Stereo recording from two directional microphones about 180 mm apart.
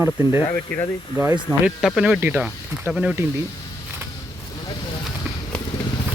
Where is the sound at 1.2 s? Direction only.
20° right (ahead or behind).